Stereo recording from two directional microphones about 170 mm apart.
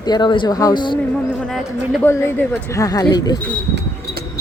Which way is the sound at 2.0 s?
15° left (ahead or behind).